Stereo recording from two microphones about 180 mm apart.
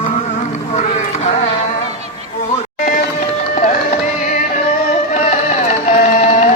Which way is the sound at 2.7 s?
45° left (ahead or behind).